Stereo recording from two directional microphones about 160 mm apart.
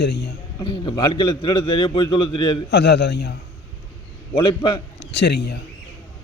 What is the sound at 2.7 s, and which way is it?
Speech, 90° left.